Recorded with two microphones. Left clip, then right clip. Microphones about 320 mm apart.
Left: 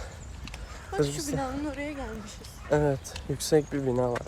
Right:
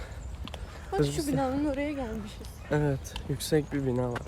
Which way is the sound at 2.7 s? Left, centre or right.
Centre.